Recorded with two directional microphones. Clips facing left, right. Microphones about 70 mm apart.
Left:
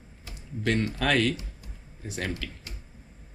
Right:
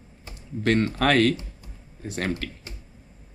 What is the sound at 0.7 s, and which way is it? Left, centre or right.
Speech, right.